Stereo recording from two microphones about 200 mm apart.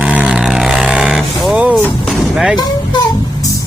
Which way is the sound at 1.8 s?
Centre (ahead or behind).